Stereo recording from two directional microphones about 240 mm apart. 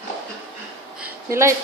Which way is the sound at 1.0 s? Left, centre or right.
Centre.